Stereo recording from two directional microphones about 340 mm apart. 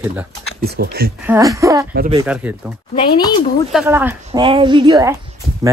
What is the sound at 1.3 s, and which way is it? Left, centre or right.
Speech, centre.